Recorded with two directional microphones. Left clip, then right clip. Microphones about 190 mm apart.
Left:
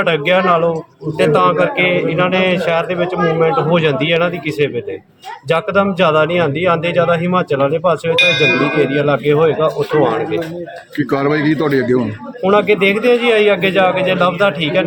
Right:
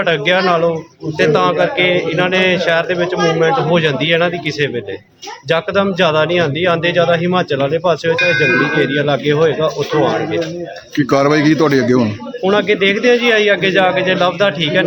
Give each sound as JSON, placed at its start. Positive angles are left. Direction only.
{"t": 0.0, "sound": "a man's voice", "side_deg": 0}
{"t": 10.9, "sound": "a man's voice", "side_deg": -50}
{"t": 12.4, "sound": "a man's voice", "side_deg": 0}